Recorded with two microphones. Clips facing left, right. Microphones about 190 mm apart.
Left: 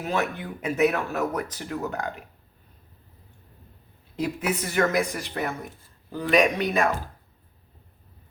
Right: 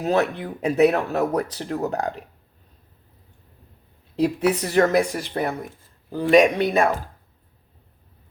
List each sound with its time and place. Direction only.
0.0 s speech: 35° right (ahead or behind)
4.2 s speech: 35° right (ahead or behind)